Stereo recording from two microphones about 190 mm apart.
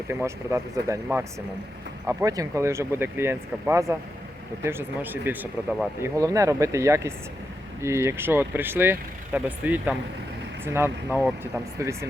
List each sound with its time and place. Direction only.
0.1 s speech: 15° right (ahead or behind)
2.0 s speech: 20° right (ahead or behind)